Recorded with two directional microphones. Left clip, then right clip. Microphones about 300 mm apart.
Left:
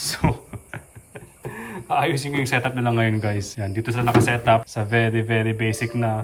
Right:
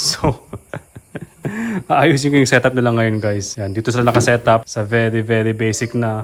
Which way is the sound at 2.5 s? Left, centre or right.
Centre.